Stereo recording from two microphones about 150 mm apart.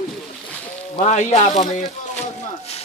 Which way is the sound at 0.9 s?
55° left (ahead or behind).